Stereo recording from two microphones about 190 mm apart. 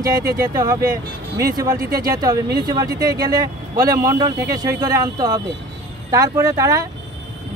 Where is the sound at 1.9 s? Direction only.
20° right (ahead or behind).